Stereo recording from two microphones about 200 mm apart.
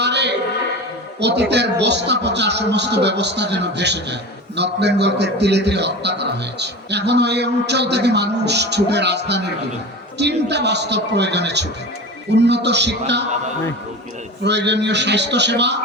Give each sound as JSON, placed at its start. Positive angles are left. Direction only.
{"t": 0.0, "sound": "a sound", "side_deg": -60}
{"t": 1.2, "sound": "a man's voice", "side_deg": -55}
{"t": 14.4, "sound": "a man's voice", "side_deg": -60}